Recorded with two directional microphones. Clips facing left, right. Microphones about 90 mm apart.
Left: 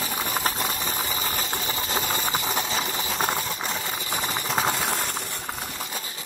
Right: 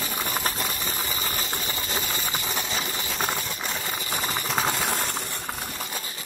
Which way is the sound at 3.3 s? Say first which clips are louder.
Left 2 dB; 25° left (ahead or behind).